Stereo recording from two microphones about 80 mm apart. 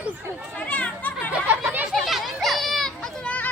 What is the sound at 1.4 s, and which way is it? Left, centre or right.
Chatter, right.